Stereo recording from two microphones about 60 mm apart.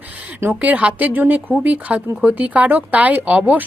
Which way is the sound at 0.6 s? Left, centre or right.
Right.